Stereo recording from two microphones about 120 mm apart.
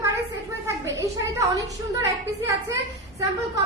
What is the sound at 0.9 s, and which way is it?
A woman's voice, 25° right (ahead or behind).